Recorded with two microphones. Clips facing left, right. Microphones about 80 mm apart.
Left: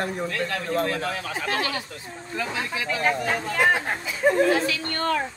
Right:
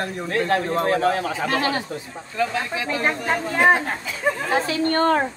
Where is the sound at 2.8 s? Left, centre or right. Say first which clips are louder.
Even; right.